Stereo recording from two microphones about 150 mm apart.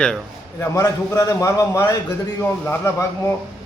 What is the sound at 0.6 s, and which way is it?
A man's voice, 20° left (ahead or behind).